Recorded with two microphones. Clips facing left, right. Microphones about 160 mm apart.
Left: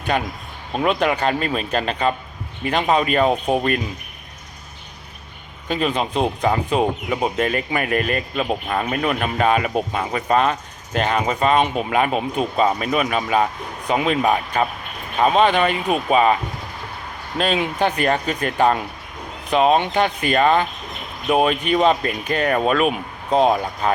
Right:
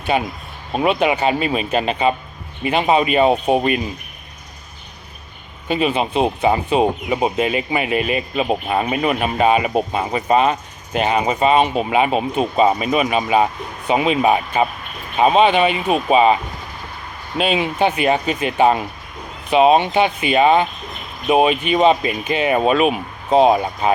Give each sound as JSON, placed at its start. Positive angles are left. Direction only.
{"t": 0.1, "sound": "speech", "side_deg": -10}
{"t": 5.6, "sound": "speech", "side_deg": -10}
{"t": 17.3, "sound": "speech", "side_deg": -5}